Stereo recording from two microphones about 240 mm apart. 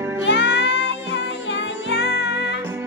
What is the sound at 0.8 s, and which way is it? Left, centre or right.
Music, left.